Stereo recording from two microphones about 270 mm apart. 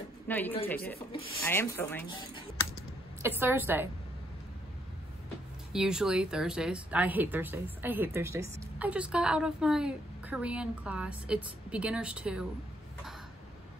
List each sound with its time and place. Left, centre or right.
0.3 s speech: centre
0.9 s speech: centre
1.4 s speech: centre
3.2 s a woman's voice: centre
5.7 s speech: centre